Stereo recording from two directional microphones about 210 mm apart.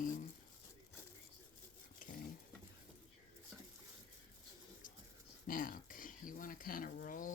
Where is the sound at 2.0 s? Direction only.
40° left (ahead or behind).